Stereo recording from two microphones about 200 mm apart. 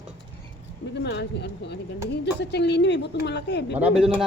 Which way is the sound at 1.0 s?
60° left (ahead or behind).